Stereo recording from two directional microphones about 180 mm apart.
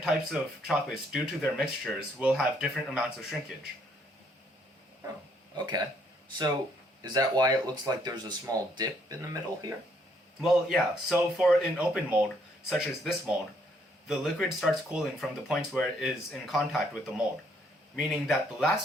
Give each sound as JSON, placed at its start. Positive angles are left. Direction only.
{"t": 0.1, "sound": "speech", "side_deg": -5}
{"t": 5.5, "sound": "speech", "side_deg": -25}
{"t": 7.0, "sound": "speech", "side_deg": -20}
{"t": 10.4, "sound": "speech", "side_deg": 0}